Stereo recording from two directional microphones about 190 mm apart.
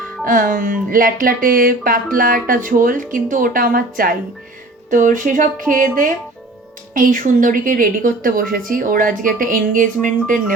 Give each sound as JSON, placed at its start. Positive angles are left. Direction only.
{"t": 0.3, "sound": "a woman's voice", "side_deg": -45}